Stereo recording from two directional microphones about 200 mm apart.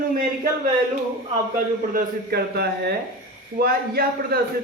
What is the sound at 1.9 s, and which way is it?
A man's voice, 55° right (ahead or behind).